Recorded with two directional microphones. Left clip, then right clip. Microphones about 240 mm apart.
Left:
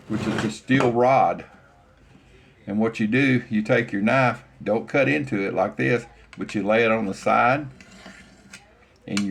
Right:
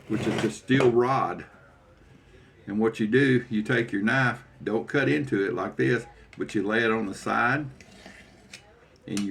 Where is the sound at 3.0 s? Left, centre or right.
Left.